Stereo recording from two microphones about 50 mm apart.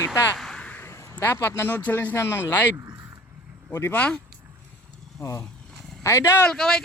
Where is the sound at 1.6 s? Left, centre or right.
Left.